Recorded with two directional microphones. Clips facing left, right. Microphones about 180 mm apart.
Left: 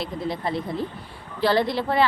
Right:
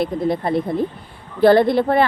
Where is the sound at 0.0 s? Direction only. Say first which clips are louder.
Right 8 dB; 55° right (ahead or behind).